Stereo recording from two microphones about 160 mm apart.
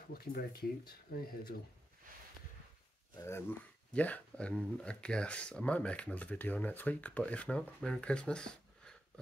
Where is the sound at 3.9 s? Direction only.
10° left (ahead or behind).